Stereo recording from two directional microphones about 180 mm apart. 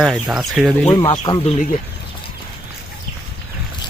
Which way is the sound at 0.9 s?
30° left (ahead or behind).